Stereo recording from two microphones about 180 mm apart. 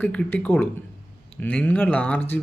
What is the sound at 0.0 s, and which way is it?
Speech, 10° left (ahead or behind).